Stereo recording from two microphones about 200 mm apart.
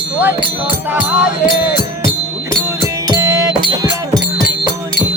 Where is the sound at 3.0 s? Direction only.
20° right (ahead or behind).